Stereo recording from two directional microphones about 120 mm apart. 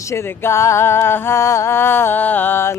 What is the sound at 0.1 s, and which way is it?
Speech, 20° left (ahead or behind).